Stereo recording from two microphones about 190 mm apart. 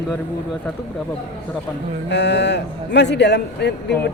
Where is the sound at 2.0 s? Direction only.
65° left (ahead or behind).